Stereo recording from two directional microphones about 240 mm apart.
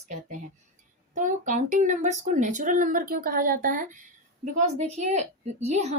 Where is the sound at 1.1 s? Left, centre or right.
Right.